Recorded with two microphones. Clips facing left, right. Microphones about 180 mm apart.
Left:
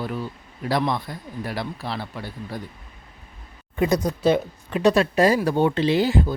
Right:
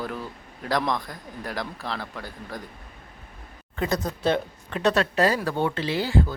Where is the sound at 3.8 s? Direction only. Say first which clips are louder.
Left 5 dB; 20° left (ahead or behind).